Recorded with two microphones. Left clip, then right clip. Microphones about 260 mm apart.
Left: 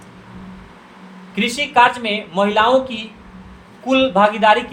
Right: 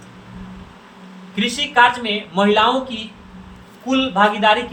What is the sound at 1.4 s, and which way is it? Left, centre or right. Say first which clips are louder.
Speech: left 1 dB; left.